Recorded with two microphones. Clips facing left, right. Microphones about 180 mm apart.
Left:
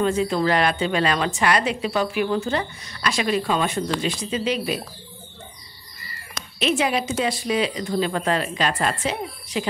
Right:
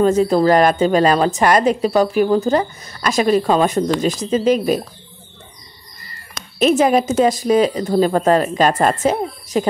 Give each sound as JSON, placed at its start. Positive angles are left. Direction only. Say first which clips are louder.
{"t": 0.0, "sound": "a woman's voice", "louder": "right 7 dB", "side_deg": -40}
{"t": 6.6, "sound": "speech", "louder": "right 8 dB", "side_deg": -45}